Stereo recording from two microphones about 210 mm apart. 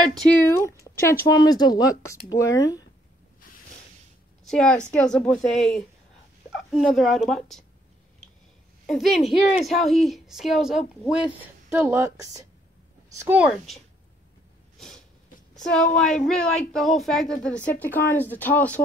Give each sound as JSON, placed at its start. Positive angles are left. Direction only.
{"t": 0.0, "sound": "speech", "side_deg": 0}
{"t": 4.5, "sound": "a woman's voice", "side_deg": 5}
{"t": 8.8, "sound": "a woman's voice", "side_deg": 0}
{"t": 15.5, "sound": "a woman's voice", "side_deg": 5}